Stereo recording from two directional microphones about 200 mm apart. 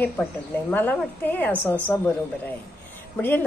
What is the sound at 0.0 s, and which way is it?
A woman's voice, 10° left (ahead or behind).